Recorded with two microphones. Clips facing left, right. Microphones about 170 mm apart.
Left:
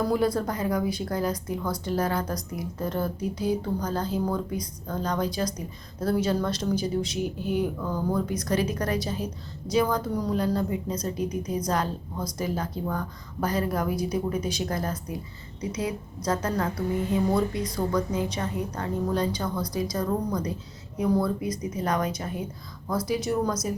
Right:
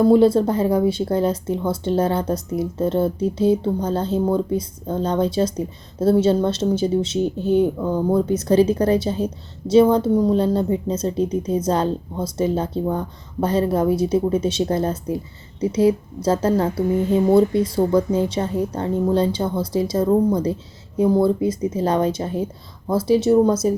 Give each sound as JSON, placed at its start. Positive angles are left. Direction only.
{"t": 0.0, "sound": "a woman's voice", "side_deg": -25}